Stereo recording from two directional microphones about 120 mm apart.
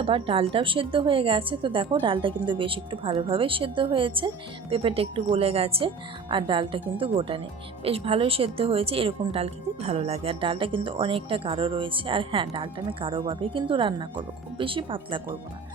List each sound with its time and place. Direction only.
0.0 s speech: 50° right (ahead or behind)